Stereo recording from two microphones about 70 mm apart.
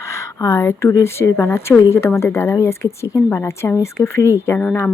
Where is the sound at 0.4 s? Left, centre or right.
Left.